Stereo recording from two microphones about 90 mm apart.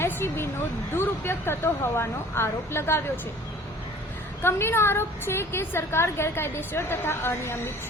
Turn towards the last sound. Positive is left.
turn(degrees=25)  # may be behind; listen again after turning